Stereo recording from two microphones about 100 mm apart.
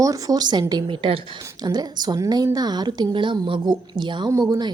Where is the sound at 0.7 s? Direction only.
60° right (ahead or behind).